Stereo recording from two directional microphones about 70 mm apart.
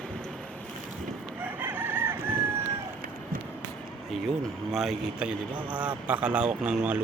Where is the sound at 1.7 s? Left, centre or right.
Right.